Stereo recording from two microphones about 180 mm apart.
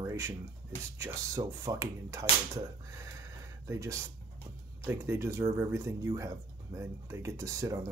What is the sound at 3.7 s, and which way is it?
Speech, 15° right (ahead or behind).